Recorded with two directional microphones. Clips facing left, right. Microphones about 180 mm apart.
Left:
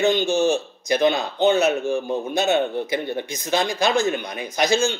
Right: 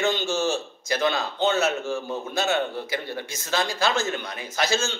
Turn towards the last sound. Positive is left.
turn(degrees=15)  # may be behind; listen again after turning